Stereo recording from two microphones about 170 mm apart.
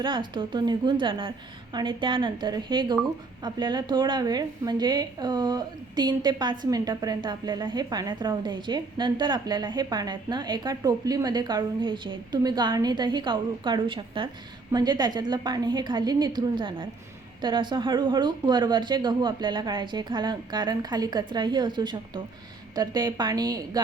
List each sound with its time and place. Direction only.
0.0 s a woman's voice: 30° right (ahead or behind)